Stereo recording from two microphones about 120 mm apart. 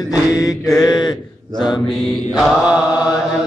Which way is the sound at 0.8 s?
35° left (ahead or behind).